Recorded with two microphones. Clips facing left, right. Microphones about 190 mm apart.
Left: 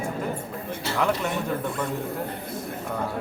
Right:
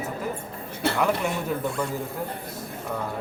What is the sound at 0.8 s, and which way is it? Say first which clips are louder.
Speech: right 6 dB; 55° right (ahead or behind).